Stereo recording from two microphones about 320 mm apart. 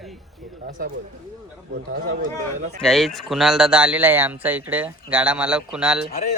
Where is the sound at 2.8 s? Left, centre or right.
Centre.